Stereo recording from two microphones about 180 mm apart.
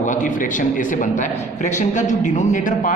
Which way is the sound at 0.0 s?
45° left (ahead or behind).